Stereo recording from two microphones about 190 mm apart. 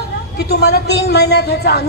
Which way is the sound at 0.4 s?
60° left (ahead or behind).